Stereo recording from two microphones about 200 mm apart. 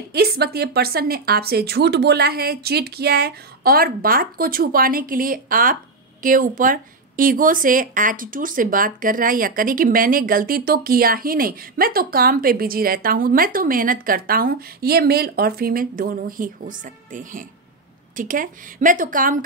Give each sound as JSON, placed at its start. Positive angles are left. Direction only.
{"t": 0.1, "sound": "speech", "side_deg": -50}